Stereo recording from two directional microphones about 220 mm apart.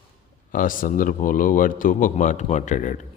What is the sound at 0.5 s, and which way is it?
A man's voice, 40° left (ahead or behind).